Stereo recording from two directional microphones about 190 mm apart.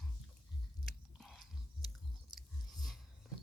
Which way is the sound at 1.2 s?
Centre (ahead or behind).